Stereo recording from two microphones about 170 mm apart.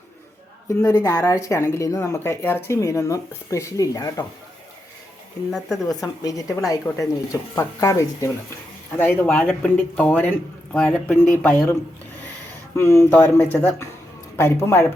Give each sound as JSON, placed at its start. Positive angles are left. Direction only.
{"t": 0.9, "sound": "speech", "side_deg": 20}
{"t": 5.5, "sound": "speech", "side_deg": 0}
{"t": 5.7, "sound": "speech", "side_deg": 20}